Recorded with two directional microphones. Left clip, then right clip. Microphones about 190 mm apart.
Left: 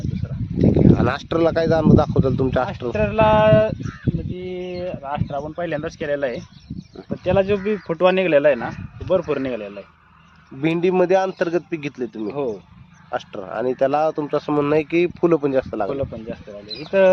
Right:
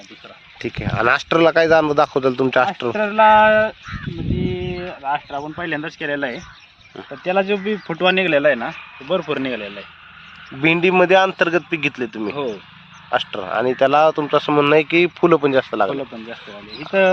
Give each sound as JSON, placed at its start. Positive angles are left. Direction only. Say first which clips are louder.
{"t": 0.6, "sound": "speech", "louder": "left 2 dB", "side_deg": 0}
{"t": 3.1, "sound": "speech", "louder": "right 3 dB", "side_deg": 60}
{"t": 4.4, "sound": "a sound", "louder": "even", "side_deg": 65}
{"t": 5.0, "sound": "speech", "louder": "right 3 dB", "side_deg": 65}
{"t": 7.3, "sound": "speech", "louder": "even", "side_deg": 40}
{"t": 7.9, "sound": "speech", "louder": "even", "side_deg": 50}
{"t": 10.6, "sound": "speech", "louder": "right 4 dB", "side_deg": 0}